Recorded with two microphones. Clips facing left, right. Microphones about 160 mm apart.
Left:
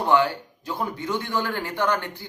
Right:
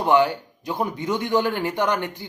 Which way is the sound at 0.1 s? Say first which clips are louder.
Right 3 dB; 15° right (ahead or behind).